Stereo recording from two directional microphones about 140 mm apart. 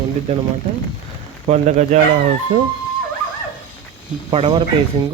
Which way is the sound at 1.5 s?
55° right (ahead or behind).